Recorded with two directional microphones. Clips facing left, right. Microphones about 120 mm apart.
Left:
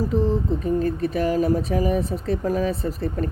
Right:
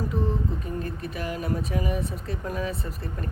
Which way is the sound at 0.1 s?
35° left (ahead or behind).